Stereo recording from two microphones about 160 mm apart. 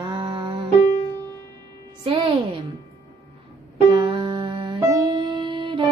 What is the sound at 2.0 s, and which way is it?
Speech, 30° right (ahead or behind).